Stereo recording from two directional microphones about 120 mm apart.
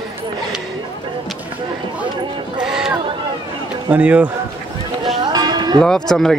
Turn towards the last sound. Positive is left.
turn(degrees=5)  # may be behind; listen again after turning